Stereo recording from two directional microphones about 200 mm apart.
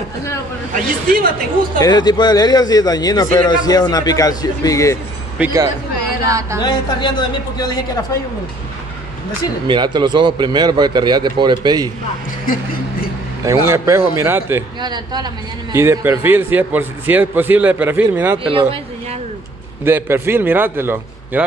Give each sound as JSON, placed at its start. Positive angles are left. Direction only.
{"t": 1.0, "sound": "speech", "side_deg": -45}
{"t": 1.8, "sound": "a man's voice", "side_deg": 20}
{"t": 5.4, "sound": "a man's voice", "side_deg": -15}
{"t": 6.6, "sound": "a man's voice", "side_deg": 25}
{"t": 9.7, "sound": "speech", "side_deg": -20}
{"t": 13.4, "sound": "a man's voice", "side_deg": -15}
{"t": 18.4, "sound": "speech", "side_deg": -25}
{"t": 19.8, "sound": "a man's voice", "side_deg": -10}